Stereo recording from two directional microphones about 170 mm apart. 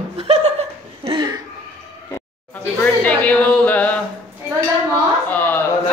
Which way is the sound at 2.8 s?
10° left (ahead or behind).